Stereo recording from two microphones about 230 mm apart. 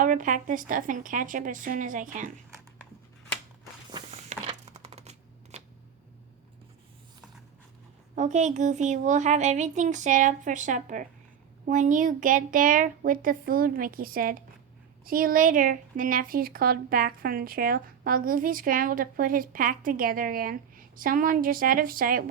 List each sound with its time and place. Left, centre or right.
0.0 s speech: right
3.9 s a sound: right
8.1 s speech: right